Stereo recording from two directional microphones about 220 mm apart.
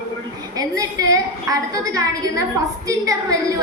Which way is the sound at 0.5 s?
15° right (ahead or behind).